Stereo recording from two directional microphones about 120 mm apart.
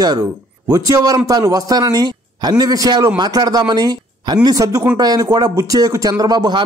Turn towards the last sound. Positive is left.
turn(degrees=-35)  # may be behind; listen again after turning